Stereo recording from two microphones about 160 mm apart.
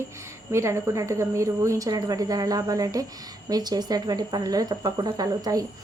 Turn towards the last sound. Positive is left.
turn(degrees=-25)  # may be behind; listen again after turning